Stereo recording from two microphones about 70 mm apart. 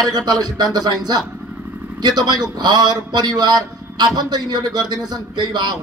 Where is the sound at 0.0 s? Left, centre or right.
Right.